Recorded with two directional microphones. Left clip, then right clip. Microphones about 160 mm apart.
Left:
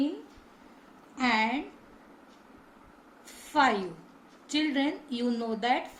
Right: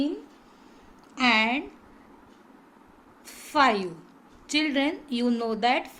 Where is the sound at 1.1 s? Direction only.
55° right (ahead or behind).